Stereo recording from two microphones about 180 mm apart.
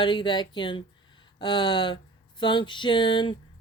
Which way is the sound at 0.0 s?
25° left (ahead or behind).